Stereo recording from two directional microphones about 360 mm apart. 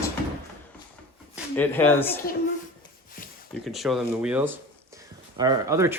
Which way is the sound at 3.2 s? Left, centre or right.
Left.